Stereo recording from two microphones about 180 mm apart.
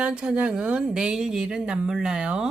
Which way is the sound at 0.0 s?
5° right (ahead or behind).